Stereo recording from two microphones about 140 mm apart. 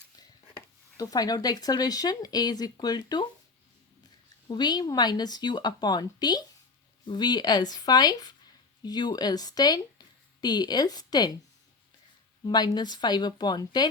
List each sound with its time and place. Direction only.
0.2 s speech: 30° left (ahead or behind)
4.4 s speech: 30° left (ahead or behind)
12.5 s speech: 30° left (ahead or behind)